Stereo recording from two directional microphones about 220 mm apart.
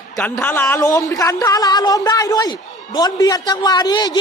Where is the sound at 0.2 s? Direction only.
10° left (ahead or behind).